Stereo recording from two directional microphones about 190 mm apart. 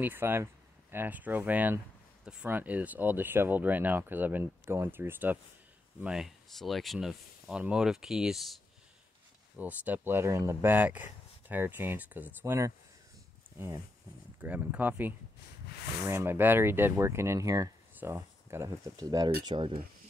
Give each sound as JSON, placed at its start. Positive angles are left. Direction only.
{"t": 0.0, "sound": "speech", "side_deg": -10}
{"t": 9.6, "sound": "speech", "side_deg": -10}
{"t": 14.4, "sound": "speech", "side_deg": -10}